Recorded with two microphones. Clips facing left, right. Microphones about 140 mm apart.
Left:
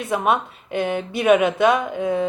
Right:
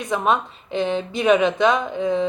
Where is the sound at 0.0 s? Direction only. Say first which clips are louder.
Even; 5° left (ahead or behind).